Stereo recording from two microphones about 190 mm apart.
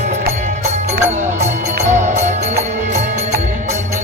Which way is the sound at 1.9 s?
40° right (ahead or behind).